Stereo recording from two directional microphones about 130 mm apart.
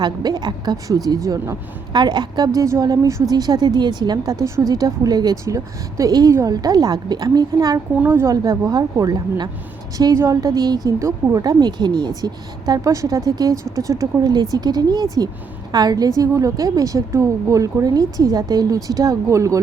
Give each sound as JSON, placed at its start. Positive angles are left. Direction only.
{"t": 0.0, "sound": "a woman's voice", "side_deg": -30}
{"t": 7.9, "sound": "a woman's voice", "side_deg": -15}